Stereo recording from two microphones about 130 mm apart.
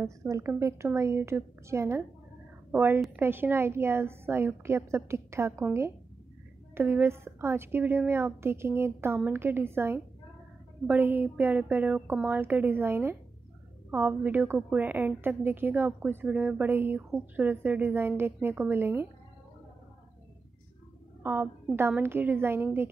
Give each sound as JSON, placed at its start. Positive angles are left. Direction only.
{"t": 0.0, "sound": "a woman's voice", "side_deg": -20}
{"t": 21.2, "sound": "a woman's voice", "side_deg": -15}